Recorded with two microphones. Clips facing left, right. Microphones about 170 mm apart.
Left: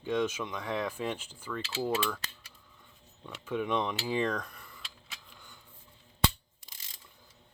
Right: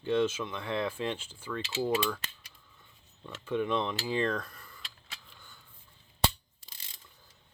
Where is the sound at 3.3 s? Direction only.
10° left (ahead or behind).